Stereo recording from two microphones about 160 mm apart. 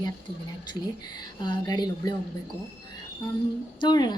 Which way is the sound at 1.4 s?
25° left (ahead or behind).